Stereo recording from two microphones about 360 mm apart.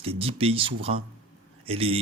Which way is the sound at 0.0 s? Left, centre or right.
Centre.